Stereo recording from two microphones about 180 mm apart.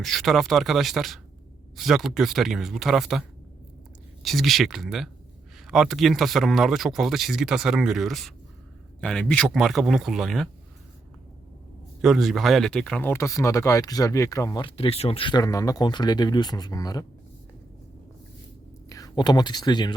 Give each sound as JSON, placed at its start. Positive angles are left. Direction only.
{"t": 0.0, "sound": "speech", "side_deg": 0}
{"t": 12.0, "sound": "speech", "side_deg": 0}
{"t": 18.9, "sound": "speech", "side_deg": 20}